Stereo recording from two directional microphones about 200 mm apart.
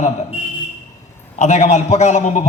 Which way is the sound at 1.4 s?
35° left (ahead or behind).